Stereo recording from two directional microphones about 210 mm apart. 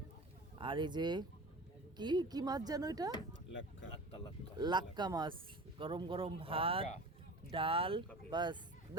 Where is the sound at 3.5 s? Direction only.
60° left (ahead or behind).